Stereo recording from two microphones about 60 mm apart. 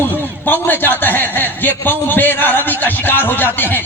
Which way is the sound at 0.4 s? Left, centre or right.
Left.